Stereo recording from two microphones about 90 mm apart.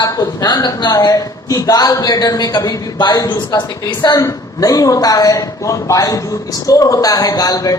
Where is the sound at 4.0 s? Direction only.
45° left (ahead or behind).